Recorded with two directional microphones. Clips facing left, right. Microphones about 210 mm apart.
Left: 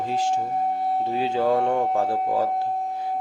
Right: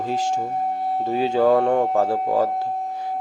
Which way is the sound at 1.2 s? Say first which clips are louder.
Right 5 dB; 45° right (ahead or behind).